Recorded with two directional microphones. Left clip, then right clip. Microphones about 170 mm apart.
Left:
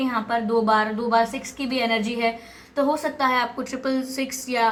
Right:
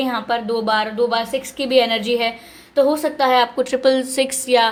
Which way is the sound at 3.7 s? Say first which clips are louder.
Right 10 dB; 45° right (ahead or behind).